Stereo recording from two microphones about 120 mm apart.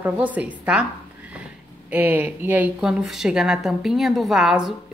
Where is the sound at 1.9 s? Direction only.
15° right (ahead or behind).